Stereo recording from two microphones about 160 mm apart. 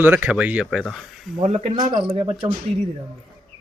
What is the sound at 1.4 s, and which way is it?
Speech, 40° right (ahead or behind).